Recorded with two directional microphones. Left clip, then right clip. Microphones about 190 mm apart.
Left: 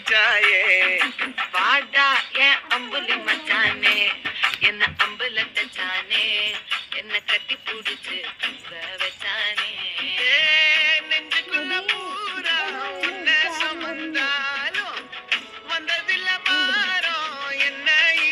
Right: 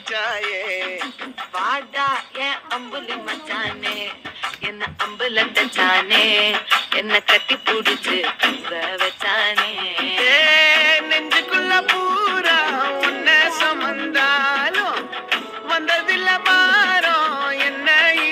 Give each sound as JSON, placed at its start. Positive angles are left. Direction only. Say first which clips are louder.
{"t": 0.1, "sound": "music", "louder": "left 7 dB", "side_deg": -5}
{"t": 5.2, "sound": "music", "louder": "right 6 dB", "side_deg": -45}